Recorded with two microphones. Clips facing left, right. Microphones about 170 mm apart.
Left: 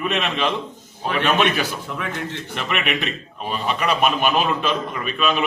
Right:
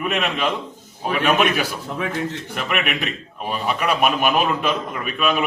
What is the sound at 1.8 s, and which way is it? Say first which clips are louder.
Speech: right 3 dB; 35° right (ahead or behind).